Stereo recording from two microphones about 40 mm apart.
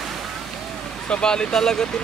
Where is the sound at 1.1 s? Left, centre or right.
Left.